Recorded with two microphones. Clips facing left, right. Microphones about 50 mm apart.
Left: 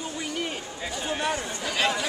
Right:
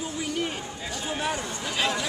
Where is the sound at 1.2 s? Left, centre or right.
Centre.